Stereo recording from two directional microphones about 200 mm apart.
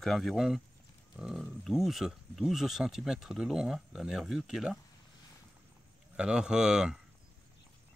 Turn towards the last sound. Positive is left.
turn(degrees=-5)  # may be behind; listen again after turning